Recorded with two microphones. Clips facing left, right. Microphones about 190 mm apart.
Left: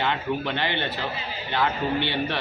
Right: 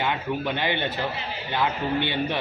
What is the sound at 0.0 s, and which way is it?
Speech, 15° right (ahead or behind).